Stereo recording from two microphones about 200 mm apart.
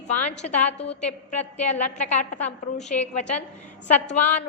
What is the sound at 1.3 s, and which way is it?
A woman's voice, 35° left (ahead or behind).